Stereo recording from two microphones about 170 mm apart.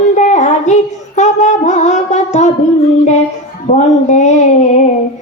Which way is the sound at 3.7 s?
45° left (ahead or behind).